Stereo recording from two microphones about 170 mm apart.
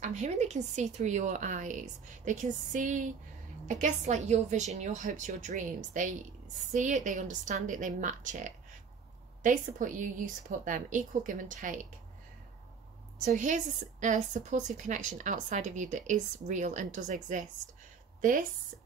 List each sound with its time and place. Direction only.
0.0 s a woman's voice: 45° right (ahead or behind)
13.2 s a woman's voice: 45° right (ahead or behind)